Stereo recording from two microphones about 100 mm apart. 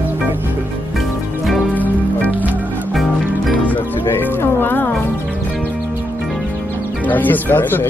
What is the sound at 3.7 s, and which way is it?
Music, 20° left (ahead or behind).